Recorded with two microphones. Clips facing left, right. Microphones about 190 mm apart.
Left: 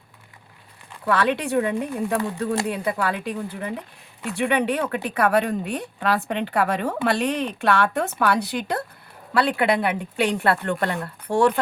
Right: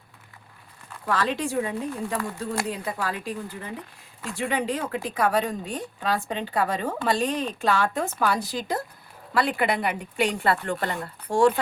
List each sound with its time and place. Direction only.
1.0 s a woman's voice: 65° left (ahead or behind)